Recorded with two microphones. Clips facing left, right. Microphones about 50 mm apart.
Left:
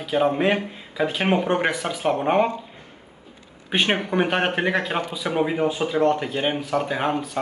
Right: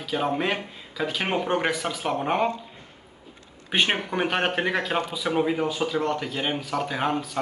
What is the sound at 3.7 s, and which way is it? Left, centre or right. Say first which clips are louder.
Speech: left 2 dB; centre.